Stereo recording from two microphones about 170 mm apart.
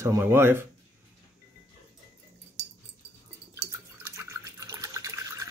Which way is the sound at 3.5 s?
15° right (ahead or behind).